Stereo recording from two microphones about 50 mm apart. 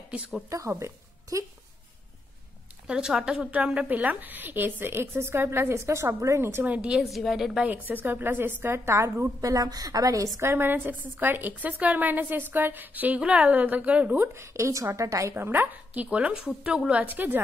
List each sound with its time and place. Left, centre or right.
0.5 s speech: right
2.9 s a woman's voice: centre
3.3 s a woman's voice: right
6.3 s a woman's voice: right
6.6 s a woman's voice: right
7.0 s a woman's voice: centre
7.6 s a woman's voice: right
8.7 s a woman's voice: right
10.1 s a woman's voice: right
10.5 s a woman's voice: right
14.1 s a woman's voice: right
15.3 s a woman's voice: right; by 17.0 s centre
17.0 s a woman's voice: right